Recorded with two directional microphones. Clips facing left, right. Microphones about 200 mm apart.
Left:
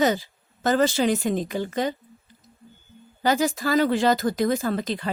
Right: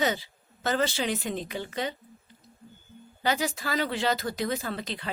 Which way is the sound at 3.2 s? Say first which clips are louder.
Left 6 dB; 45° left (ahead or behind).